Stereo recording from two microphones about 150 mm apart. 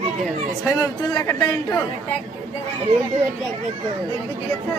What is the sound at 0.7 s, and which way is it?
Speech, 25° left (ahead or behind).